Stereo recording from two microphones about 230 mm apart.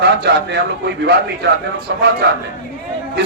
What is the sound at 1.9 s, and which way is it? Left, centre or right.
Speech, right.